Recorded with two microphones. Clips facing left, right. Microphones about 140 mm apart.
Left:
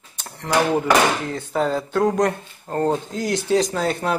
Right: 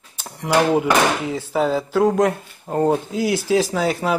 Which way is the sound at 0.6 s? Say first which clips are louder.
Right 1 dB; 10° right (ahead or behind).